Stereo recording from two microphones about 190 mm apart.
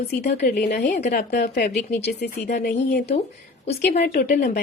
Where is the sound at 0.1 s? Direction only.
55° left (ahead or behind).